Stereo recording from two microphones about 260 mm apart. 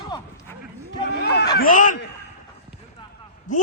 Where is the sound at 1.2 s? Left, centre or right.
Left.